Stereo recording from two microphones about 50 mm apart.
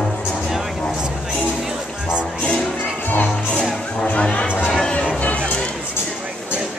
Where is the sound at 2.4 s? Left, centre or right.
Left.